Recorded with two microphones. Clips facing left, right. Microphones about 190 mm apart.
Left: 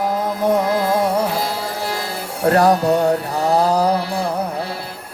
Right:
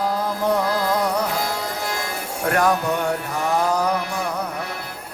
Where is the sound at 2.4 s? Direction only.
35° left (ahead or behind).